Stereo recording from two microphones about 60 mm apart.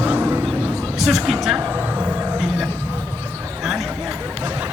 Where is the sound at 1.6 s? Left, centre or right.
Right.